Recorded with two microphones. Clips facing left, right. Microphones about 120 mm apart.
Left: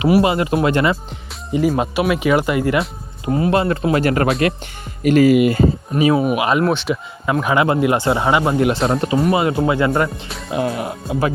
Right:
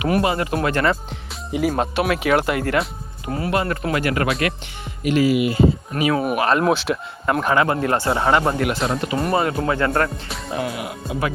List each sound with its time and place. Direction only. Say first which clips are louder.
0.2 s speech: left 4 dB; 20° left (ahead or behind)
0.9 s speech: left 1 dB; centre (ahead or behind)
3.2 s speech: left 5 dB; 25° left (ahead or behind)
5.0 s speech: left 6 dB; 50° left (ahead or behind)
6.2 s speech: left 1 dB; 10° left (ahead or behind)
7.5 s speech: left 4 dB; 15° left (ahead or behind)
8.5 s speech: left 5 dB; 25° left (ahead or behind)
9.1 s speech: left 4 dB; centre (ahead or behind)
9.4 s speech: left 4 dB; 20° left (ahead or behind); by 10.6 s 5° left (ahead or behind)
10.6 s speech: left 7 dB; 35° left (ahead or behind)